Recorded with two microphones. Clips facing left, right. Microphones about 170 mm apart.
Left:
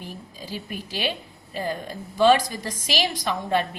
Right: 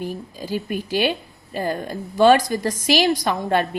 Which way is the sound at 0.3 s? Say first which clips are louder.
Right 8 dB; 50° right (ahead or behind).